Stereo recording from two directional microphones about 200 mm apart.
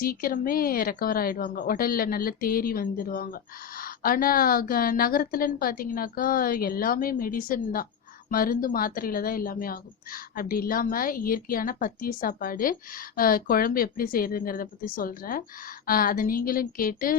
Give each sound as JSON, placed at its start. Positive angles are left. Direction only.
{"t": 0.0, "sound": "speech", "side_deg": 45}